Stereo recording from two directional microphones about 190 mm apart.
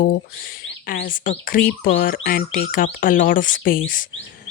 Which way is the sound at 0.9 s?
45° left (ahead or behind).